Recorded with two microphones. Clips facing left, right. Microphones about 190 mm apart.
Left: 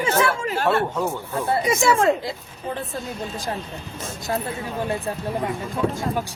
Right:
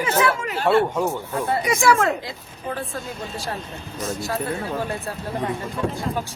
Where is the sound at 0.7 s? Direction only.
15° right (ahead or behind).